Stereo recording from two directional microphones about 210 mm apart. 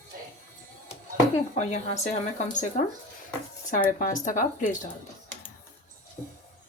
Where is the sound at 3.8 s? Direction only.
40° left (ahead or behind).